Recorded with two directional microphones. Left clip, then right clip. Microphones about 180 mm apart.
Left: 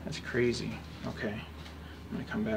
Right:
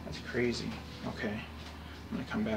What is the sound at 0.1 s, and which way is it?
Speech, 40° left (ahead or behind).